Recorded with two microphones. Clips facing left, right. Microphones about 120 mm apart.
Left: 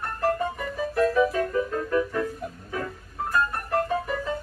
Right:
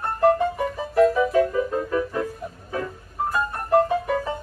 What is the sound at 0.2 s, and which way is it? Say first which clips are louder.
Music: right 7 dB; 20° right (ahead or behind).